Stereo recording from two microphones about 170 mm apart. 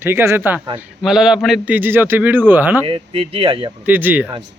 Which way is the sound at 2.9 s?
30° right (ahead or behind).